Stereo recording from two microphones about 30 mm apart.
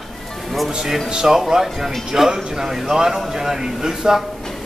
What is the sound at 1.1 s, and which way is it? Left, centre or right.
Speech, centre.